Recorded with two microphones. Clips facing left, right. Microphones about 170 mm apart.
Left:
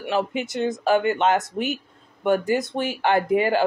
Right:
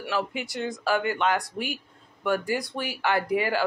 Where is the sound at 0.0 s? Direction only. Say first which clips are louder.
Left 5 dB; 20° left (ahead or behind).